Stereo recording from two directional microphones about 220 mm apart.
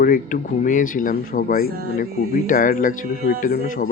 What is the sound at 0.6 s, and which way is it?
Speech, 40° left (ahead or behind).